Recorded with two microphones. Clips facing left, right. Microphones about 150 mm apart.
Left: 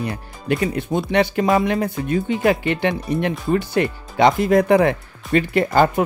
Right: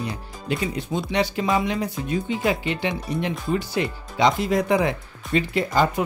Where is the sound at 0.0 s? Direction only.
60° left (ahead or behind).